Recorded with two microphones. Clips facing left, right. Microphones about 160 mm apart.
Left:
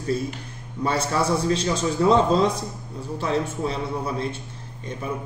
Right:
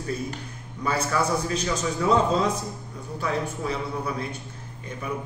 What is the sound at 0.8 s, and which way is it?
A man's voice, 30° left (ahead or behind).